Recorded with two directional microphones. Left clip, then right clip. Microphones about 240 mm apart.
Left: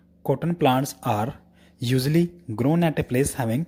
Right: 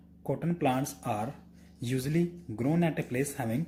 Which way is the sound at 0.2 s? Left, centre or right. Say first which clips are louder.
Left 9 dB; left.